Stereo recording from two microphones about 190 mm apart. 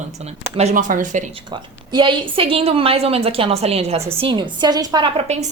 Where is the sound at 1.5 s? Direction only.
25° right (ahead or behind).